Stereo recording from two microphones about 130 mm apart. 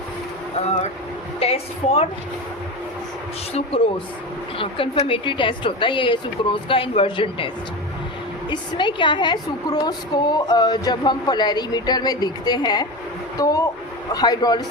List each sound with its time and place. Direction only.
1.4 s a woman's voice: 50° left (ahead or behind)
4.5 s a woman's voice: 45° left (ahead or behind)